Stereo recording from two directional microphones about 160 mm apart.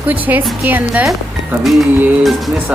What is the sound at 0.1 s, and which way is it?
A woman's voice, 10° right (ahead or behind).